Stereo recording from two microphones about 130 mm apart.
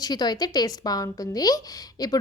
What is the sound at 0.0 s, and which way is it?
Speech, 30° left (ahead or behind).